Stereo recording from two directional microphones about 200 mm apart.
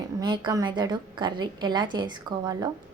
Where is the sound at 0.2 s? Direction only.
20° right (ahead or behind).